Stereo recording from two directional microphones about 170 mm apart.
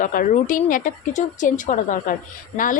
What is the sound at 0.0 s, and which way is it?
A woman's voice, 55° left (ahead or behind).